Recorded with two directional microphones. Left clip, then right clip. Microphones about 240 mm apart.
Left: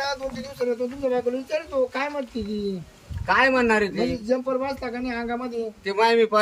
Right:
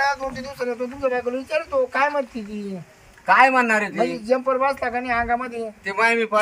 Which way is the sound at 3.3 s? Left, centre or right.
Centre.